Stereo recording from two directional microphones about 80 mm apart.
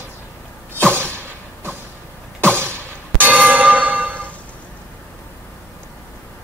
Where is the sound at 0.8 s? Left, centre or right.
Centre.